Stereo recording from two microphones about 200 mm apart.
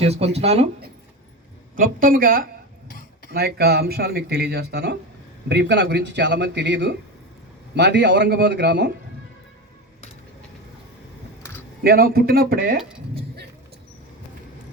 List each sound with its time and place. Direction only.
0.0 s speech: 30° right (ahead or behind)
1.7 s speech: 45° right (ahead or behind)
11.8 s speech: 50° right (ahead or behind)